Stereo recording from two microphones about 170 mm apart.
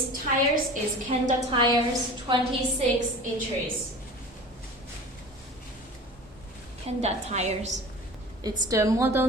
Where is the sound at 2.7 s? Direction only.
45° right (ahead or behind).